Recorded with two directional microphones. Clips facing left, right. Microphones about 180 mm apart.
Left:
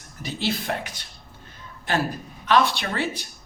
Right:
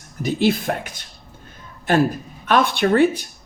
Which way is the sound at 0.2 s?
50° right (ahead or behind).